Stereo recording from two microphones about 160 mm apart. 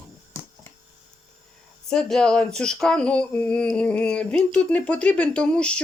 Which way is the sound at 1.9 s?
5° left (ahead or behind).